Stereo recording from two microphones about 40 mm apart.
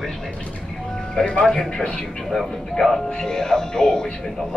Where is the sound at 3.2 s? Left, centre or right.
Centre.